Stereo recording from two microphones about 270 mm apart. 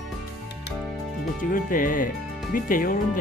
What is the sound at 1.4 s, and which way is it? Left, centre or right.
Speech, left.